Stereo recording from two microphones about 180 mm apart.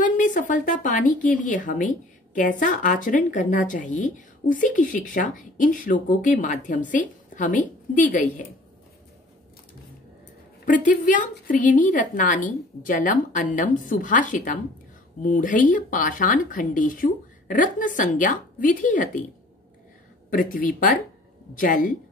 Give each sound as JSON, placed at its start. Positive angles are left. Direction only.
{"t": 0.0, "sound": "a woman's voice", "side_deg": 45}
{"t": 10.6, "sound": "a woman's voice", "side_deg": 45}
{"t": 20.2, "sound": "a woman's voice", "side_deg": 50}